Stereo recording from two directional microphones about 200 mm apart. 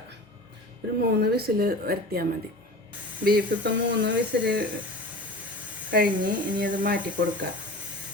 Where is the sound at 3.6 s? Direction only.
65° right (ahead or behind).